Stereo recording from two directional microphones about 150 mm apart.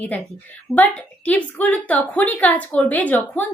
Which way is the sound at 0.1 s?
10° left (ahead or behind).